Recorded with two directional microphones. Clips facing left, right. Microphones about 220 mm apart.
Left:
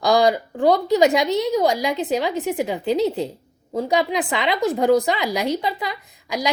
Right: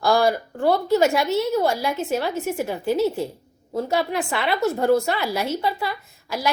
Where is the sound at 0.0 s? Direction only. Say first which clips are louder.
Left 2 dB; 15° left (ahead or behind).